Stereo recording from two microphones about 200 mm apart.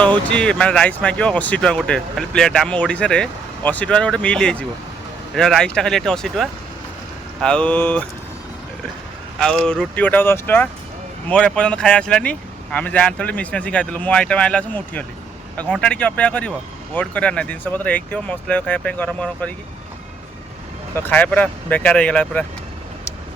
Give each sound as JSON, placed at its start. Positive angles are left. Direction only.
{"t": 0.3, "sound": "speech", "side_deg": 5}
{"t": 9.4, "sound": "speech", "side_deg": 5}
{"t": 20.9, "sound": "speech", "side_deg": 10}